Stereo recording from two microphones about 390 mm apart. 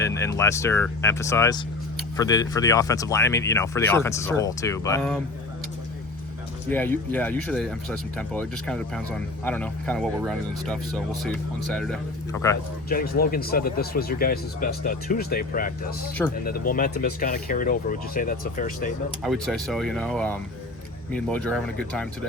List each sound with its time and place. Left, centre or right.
0.0 s speech: centre
6.7 s speech: centre
12.9 s speech: left
19.2 s speech: centre